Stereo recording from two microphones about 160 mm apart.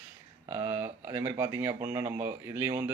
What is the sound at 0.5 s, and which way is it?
Speech, 15° right (ahead or behind).